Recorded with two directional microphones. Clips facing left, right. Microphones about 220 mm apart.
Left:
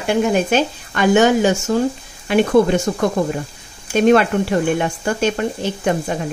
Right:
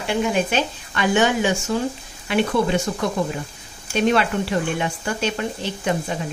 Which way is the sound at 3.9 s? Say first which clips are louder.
Left 6 dB; 50° left (ahead or behind).